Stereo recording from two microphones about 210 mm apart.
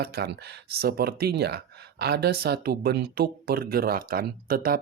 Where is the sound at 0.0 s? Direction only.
50° right (ahead or behind).